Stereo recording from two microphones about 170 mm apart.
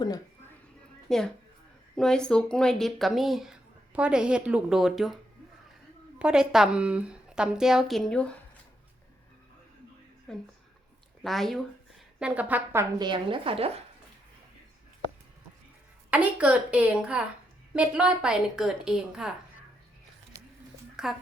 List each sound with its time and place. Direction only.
1.0 s a woman's voice: centre (ahead or behind)
10.3 s a woman's voice: 5° left (ahead or behind)
13.0 s speech: 25° right (ahead or behind)
16.0 s a woman's voice: 10° right (ahead or behind)
20.9 s a sound: centre (ahead or behind)